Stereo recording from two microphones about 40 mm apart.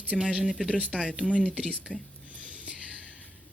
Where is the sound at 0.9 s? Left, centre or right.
Left.